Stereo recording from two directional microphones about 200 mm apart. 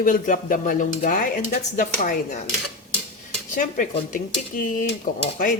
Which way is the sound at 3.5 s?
40° left (ahead or behind).